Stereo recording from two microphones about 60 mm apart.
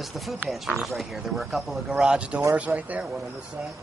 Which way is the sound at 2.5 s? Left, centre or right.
Right.